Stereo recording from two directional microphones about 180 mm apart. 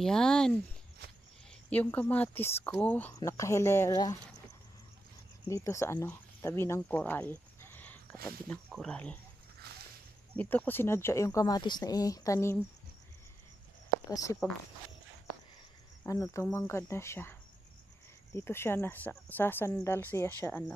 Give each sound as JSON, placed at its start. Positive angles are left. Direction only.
{"t": 0.0, "sound": "speech", "side_deg": 5}
{"t": 5.5, "sound": "speech", "side_deg": 15}
{"t": 10.3, "sound": "speech", "side_deg": 10}
{"t": 14.1, "sound": "speech", "side_deg": 20}
{"t": 16.1, "sound": "speech", "side_deg": 20}